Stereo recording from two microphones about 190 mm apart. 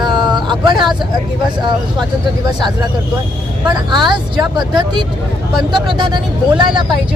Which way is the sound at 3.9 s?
25° right (ahead or behind).